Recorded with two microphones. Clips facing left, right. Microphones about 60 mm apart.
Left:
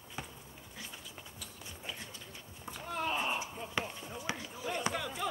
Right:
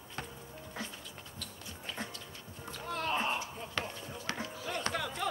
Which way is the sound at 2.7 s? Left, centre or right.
Centre.